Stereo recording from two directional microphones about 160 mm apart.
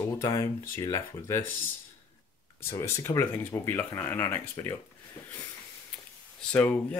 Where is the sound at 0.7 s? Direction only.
15° left (ahead or behind).